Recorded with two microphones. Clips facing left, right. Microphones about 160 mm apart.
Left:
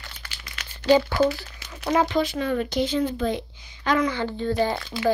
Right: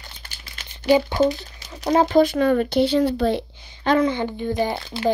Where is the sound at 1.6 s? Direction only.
35° right (ahead or behind); by 3.4 s 65° right (ahead or behind).